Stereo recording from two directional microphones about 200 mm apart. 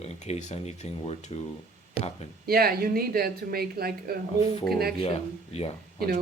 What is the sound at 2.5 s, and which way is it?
Speech, 50° right (ahead or behind).